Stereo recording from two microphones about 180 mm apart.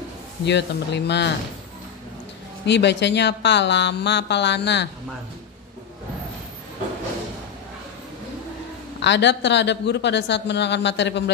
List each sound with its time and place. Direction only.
0.5 s speech: 70° left (ahead or behind)
2.6 s speech: 70° left (ahead or behind)
9.0 s speech: 75° left (ahead or behind)